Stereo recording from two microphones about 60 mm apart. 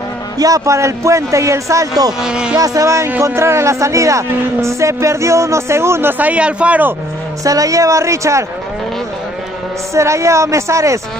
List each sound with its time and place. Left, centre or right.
0.4 s a man's voice: right
0.7 s speech: right
2.2 s speech: centre
2.5 s a man's voice: right
6.1 s a man's voice: right
7.4 s speech: right
9.9 s speech: right